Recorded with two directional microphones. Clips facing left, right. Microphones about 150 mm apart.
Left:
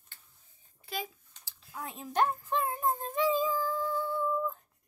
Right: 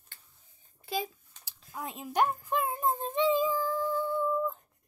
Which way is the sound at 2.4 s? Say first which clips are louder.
Right 1 dB; 10° right (ahead or behind).